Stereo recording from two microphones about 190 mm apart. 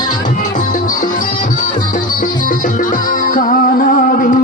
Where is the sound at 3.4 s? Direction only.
45° left (ahead or behind).